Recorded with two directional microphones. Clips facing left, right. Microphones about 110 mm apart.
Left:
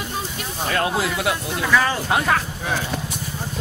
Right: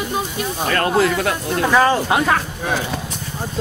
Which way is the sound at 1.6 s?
40° right (ahead or behind).